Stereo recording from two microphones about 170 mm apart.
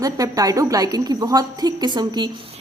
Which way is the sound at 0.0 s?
20° right (ahead or behind).